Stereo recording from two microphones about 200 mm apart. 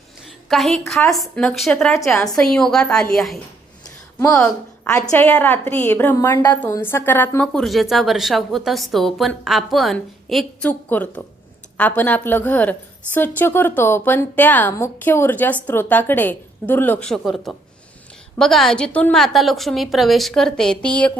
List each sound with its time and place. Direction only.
0.4 s a woman's voice: centre (ahead or behind)